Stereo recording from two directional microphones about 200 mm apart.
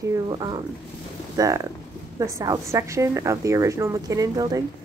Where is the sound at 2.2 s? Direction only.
15° right (ahead or behind).